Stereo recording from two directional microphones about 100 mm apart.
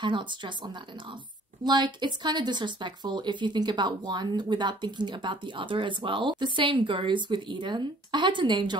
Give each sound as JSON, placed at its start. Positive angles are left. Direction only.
{"t": 0.0, "sound": "a woman's voice", "side_deg": -50}
{"t": 1.6, "sound": "a woman's voice", "side_deg": -50}